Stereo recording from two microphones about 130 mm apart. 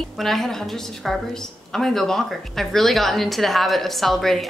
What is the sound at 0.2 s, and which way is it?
A woman's voice, centre (ahead or behind).